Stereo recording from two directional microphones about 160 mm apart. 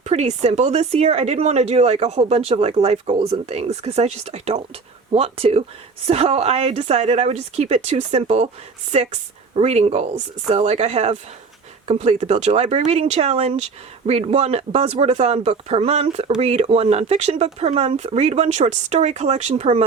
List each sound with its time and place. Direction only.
0.0 s speech: 45° right (ahead or behind)